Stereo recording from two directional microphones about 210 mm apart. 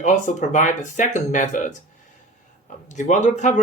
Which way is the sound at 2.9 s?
35° left (ahead or behind).